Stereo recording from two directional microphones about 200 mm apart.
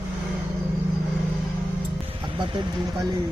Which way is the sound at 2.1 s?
25° right (ahead or behind).